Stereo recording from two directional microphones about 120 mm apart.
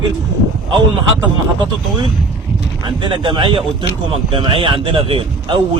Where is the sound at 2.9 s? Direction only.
40° right (ahead or behind).